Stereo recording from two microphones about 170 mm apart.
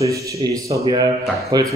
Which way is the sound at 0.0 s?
20° right (ahead or behind).